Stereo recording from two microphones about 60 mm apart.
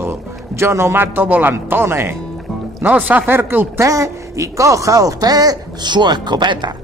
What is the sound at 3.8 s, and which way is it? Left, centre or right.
Speech, right.